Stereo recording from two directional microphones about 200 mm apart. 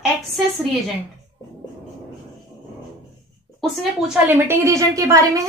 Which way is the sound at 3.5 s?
Centre (ahead or behind).